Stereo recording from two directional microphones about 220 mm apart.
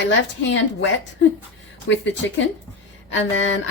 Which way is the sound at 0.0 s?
55° left (ahead or behind).